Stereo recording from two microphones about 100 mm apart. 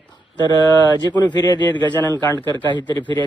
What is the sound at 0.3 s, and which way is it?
Speech, 45° left (ahead or behind).